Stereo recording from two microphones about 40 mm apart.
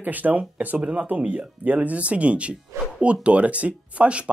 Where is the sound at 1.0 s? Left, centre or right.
Right.